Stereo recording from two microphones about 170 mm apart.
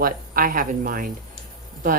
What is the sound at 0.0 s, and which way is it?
Speech, 55° right (ahead or behind).